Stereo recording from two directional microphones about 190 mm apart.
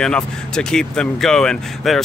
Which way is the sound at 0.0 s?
5° left (ahead or behind).